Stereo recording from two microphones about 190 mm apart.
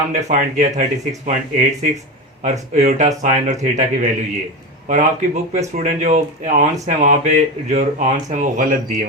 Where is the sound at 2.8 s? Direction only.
40° right (ahead or behind).